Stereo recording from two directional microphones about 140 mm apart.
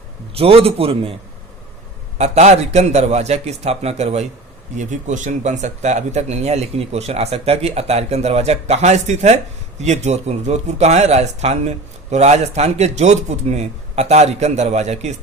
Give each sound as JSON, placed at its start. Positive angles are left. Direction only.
{"t": 0.3, "sound": "a man's voice", "side_deg": -40}
{"t": 2.1, "sound": "speech", "side_deg": -55}